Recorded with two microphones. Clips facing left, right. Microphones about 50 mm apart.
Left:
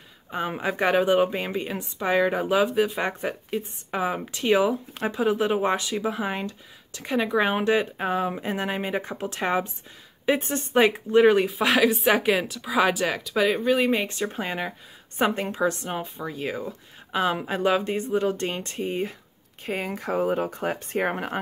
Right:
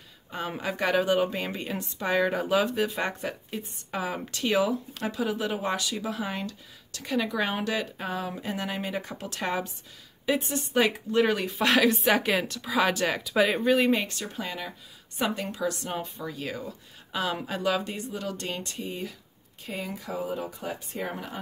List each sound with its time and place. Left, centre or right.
0.3 s a woman's voice: left
3.1 s speech: left
11.4 s speech: centre
14.2 s speech: left
15.8 s speech: centre; by 21.4 s left